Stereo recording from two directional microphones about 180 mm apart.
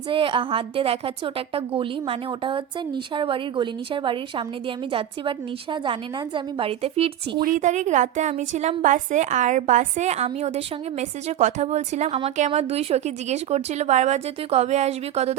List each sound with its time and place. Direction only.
0.1 s a woman's voice: 30° right (ahead or behind)
7.4 s a woman's voice: 45° right (ahead or behind)